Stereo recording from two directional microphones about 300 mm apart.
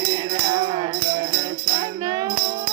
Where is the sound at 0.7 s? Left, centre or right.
Centre.